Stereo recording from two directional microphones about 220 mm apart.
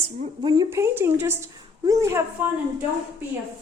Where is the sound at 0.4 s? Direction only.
15° right (ahead or behind).